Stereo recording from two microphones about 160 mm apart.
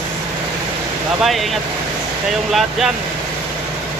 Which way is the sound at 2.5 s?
Centre (ahead or behind).